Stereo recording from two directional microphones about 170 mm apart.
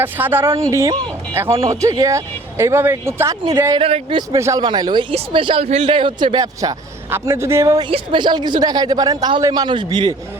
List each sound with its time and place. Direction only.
0.0 s a man's voice: 10° right (ahead or behind)
3.8 s a man's voice: 35° right (ahead or behind)
4.3 s a man's voice: 20° right (ahead or behind)
7.9 s a man's voice: 30° right (ahead or behind)